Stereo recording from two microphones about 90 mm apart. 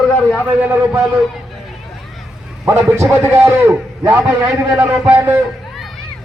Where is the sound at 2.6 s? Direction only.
30° right (ahead or behind).